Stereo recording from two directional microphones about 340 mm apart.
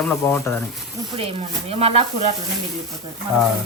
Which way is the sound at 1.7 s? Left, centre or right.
Centre.